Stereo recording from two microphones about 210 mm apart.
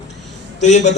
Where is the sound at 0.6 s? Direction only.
35° left (ahead or behind).